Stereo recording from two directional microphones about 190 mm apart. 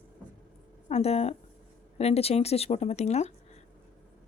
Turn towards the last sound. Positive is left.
turn(degrees=35)  # may be behind; listen again after turning